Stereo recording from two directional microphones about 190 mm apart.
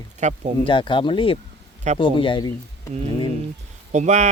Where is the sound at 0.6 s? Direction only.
25° left (ahead or behind).